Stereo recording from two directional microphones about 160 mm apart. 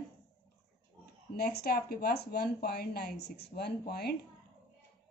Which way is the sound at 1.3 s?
80° left.